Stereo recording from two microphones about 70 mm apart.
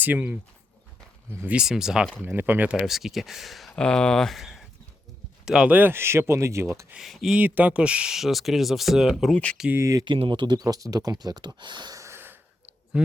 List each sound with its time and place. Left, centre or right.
0.0 s speech: right
1.6 s speech: centre
2.2 s speech: right
2.7 s speech: centre
3.8 s speech: centre
5.6 s speech: right
5.9 s speech: right
7.0 s speech: centre
7.3 s speech: right; by 9.1 s centre
9.3 s speech: centre
9.7 s speech: right
10.0 s speech: right
11.9 s a sound: right